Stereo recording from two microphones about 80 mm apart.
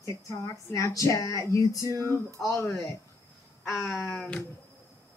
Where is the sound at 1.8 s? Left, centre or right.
Right.